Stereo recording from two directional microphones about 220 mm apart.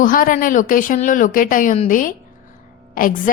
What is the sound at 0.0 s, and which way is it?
A woman's voice, 40° left (ahead or behind).